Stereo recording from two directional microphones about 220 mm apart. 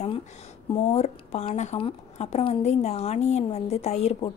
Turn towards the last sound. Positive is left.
turn(degrees=30)  # may be behind; listen again after turning